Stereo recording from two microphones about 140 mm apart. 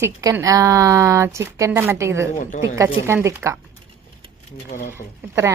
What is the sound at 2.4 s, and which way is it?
Speech, 65° left (ahead or behind).